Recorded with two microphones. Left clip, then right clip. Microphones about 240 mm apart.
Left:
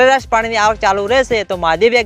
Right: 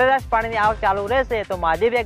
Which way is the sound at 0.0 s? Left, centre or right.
Left.